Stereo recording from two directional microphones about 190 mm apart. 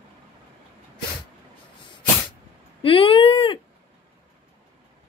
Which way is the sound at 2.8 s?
30° left (ahead or behind).